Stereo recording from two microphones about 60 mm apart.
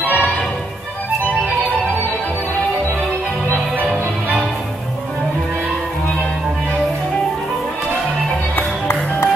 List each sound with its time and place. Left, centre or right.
0.0 s music: right
8.5 s music: left